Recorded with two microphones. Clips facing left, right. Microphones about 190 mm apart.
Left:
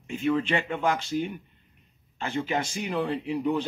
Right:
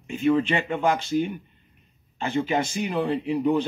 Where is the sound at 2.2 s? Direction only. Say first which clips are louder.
Right 4 dB; 20° right (ahead or behind).